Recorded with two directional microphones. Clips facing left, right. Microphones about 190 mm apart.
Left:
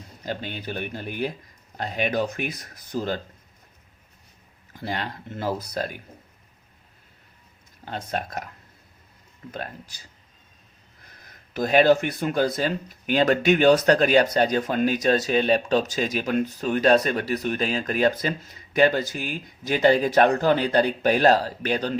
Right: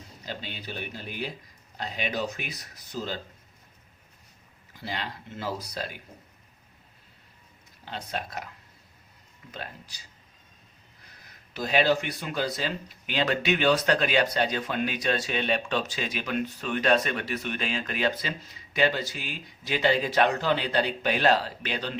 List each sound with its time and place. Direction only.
0.3 s speech: 50° left (ahead or behind)
4.7 s speech: 50° left (ahead or behind)
7.9 s speech: 50° left (ahead or behind)
9.5 s speech: 50° left (ahead or behind)
11.5 s speech: 50° left (ahead or behind)